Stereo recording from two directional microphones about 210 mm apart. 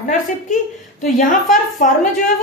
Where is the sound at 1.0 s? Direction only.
35° left (ahead or behind).